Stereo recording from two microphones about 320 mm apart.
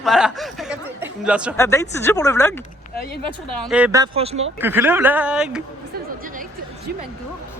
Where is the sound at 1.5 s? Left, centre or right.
Centre.